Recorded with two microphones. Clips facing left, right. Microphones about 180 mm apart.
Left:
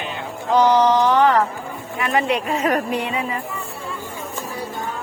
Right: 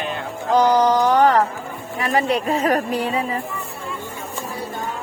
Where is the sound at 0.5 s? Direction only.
40° right (ahead or behind).